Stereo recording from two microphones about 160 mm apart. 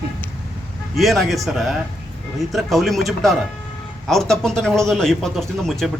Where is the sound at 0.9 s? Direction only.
Centre (ahead or behind).